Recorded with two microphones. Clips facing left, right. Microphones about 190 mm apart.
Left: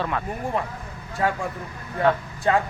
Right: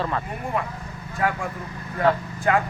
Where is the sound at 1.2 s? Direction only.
25° left (ahead or behind).